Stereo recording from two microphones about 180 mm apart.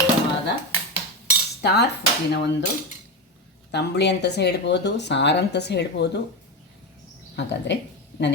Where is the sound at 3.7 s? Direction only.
70° left (ahead or behind).